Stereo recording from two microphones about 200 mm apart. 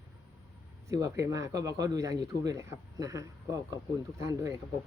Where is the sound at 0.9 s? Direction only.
15° right (ahead or behind).